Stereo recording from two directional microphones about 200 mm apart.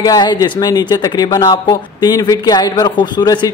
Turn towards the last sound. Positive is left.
turn(degrees=20)  # may be behind; listen again after turning